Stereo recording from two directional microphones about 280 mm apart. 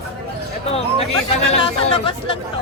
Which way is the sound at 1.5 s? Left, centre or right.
Centre.